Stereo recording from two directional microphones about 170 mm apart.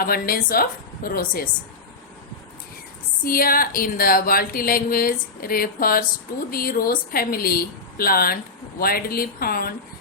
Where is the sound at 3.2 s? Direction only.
55° left (ahead or behind).